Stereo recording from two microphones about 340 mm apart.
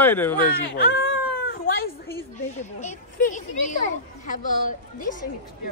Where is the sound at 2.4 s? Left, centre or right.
Left.